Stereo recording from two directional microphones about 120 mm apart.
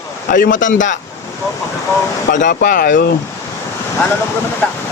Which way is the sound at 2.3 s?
90° left.